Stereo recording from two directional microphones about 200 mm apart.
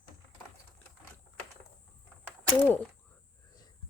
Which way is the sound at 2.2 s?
5° left (ahead or behind).